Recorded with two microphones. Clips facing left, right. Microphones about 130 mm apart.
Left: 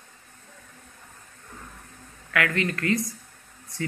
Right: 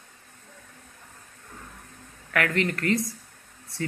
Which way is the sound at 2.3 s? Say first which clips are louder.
Right 1 dB; 25° right (ahead or behind).